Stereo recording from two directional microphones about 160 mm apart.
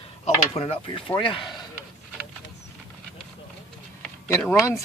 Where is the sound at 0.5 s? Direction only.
40° left (ahead or behind).